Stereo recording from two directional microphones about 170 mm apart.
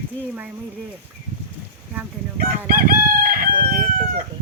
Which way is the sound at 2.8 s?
55° right (ahead or behind).